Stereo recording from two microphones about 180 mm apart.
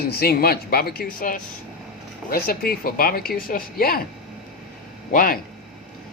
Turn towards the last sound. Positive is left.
turn(degrees=50)  # may be behind; listen again after turning